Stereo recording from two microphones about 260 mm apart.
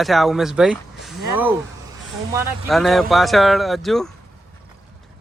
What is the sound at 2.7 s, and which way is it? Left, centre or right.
Speech, centre.